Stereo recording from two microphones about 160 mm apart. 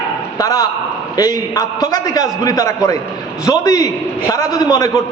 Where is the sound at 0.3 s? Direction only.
20° left (ahead or behind).